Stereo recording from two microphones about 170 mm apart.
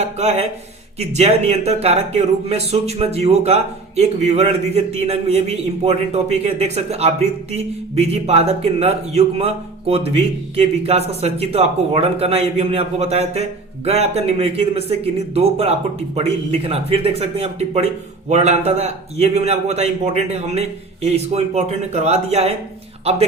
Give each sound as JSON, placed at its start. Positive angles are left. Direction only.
{"t": 0.0, "sound": "speech", "side_deg": -40}